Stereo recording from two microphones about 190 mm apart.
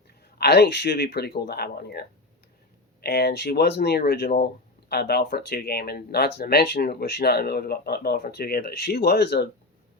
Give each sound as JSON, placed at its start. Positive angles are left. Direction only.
{"t": 0.1, "sound": "speech", "side_deg": 55}